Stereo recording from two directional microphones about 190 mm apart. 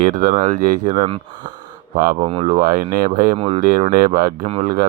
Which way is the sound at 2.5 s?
50° right (ahead or behind).